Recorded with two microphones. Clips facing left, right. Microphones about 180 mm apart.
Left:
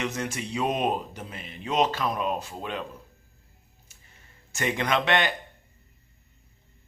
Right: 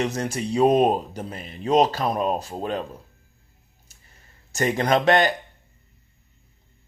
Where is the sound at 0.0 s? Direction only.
35° right (ahead or behind).